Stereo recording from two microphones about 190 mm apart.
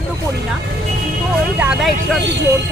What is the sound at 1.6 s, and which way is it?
Speech, 5° right (ahead or behind).